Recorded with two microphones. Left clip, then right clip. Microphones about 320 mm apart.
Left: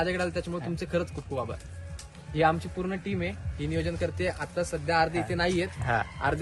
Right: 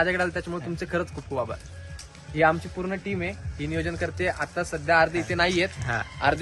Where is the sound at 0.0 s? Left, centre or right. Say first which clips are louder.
Right 5 dB; centre.